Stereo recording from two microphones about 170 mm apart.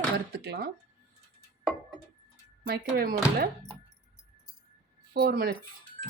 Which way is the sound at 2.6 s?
60° right (ahead or behind).